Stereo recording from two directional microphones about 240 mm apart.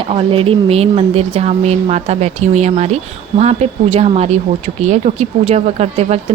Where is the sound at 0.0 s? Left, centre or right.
Right.